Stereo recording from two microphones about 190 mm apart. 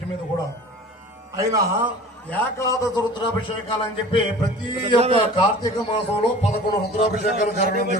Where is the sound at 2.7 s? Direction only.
15° left (ahead or behind).